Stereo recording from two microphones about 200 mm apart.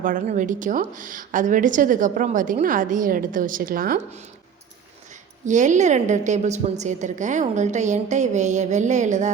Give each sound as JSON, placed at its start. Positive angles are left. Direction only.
{"t": 0.0, "sound": "a woman's voice", "side_deg": -40}
{"t": 5.5, "sound": "a woman's voice", "side_deg": -35}